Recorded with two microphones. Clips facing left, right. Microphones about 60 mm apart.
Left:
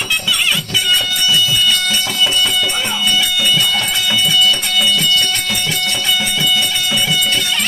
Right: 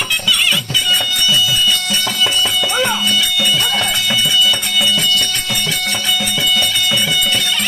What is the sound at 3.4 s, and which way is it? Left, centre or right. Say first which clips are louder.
Music: even; centre.